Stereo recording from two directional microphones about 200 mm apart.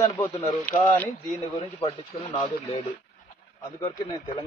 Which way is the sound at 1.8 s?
30° left (ahead or behind).